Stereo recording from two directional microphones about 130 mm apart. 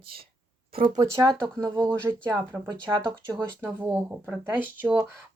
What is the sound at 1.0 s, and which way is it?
Speech, 30° right (ahead or behind).